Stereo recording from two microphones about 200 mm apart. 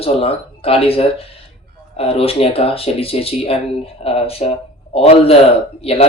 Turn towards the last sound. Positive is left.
turn(degrees=30)  # may be behind; listen again after turning